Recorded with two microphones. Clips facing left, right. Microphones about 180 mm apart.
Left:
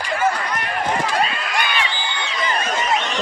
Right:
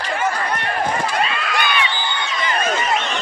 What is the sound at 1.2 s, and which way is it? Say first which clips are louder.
Run: right 1 dB; 40° left (ahead or behind).